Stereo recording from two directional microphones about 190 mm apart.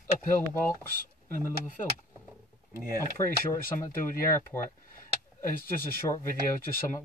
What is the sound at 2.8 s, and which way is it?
Speech, 20° right (ahead or behind).